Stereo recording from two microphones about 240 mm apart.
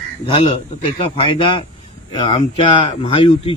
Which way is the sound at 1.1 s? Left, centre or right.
Left.